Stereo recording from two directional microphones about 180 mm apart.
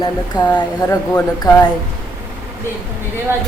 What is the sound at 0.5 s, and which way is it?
Speech, 10° left (ahead or behind).